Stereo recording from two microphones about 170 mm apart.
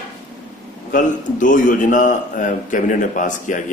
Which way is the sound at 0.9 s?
50° left (ahead or behind).